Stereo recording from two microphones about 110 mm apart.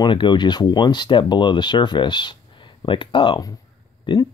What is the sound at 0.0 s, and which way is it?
Speech, 45° left (ahead or behind).